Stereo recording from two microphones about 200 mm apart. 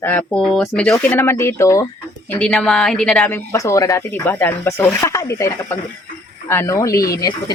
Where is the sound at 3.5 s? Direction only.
15° left (ahead or behind).